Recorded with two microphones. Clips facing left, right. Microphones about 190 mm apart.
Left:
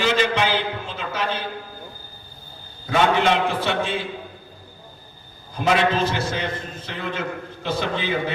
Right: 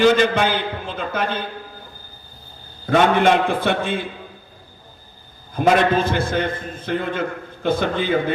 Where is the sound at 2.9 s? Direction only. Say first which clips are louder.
Right 4 dB; 50° right (ahead or behind).